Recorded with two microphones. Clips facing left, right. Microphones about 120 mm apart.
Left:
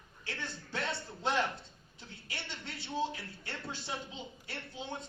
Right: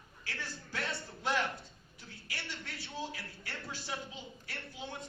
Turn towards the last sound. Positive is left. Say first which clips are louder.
# left 3 dB
turn(degrees=25)  # may be behind; listen again after turning